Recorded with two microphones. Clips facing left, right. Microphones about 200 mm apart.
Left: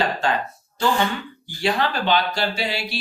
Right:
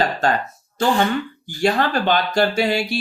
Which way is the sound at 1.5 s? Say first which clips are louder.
Right 3 dB; 45° right (ahead or behind).